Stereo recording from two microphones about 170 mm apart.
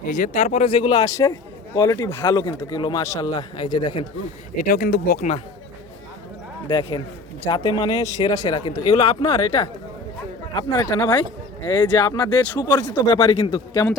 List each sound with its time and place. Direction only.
0.0 s a man's voice: 50° left (ahead or behind); by 4.0 s 25° left (ahead or behind)
4.5 s speech: 55° left (ahead or behind)
6.7 s a man's voice: 25° left (ahead or behind); by 12.6 s 10° left (ahead or behind)
13.1 s speech: 35° left (ahead or behind)
13.3 s a man's voice: 20° left (ahead or behind)